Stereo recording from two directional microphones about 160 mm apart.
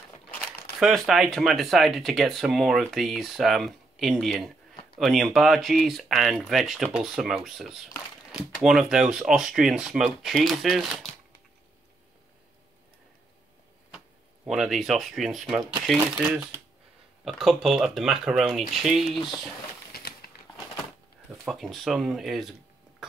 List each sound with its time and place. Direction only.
0.7 s speech: centre (ahead or behind)
13.9 s speech: 5° right (ahead or behind)
19.9 s a sound: 70° left (ahead or behind)
21.3 s speech: centre (ahead or behind)